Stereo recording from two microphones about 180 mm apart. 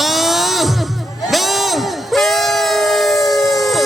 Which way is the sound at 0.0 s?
Centre (ahead or behind).